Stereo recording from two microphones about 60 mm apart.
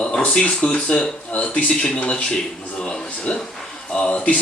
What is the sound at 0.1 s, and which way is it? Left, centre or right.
Speech, left.